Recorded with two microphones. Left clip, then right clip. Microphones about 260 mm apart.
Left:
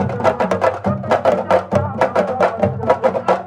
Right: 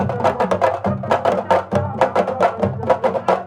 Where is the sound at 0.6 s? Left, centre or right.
Centre.